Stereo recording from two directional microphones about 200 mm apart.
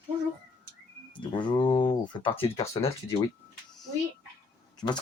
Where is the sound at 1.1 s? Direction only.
25° left (ahead or behind).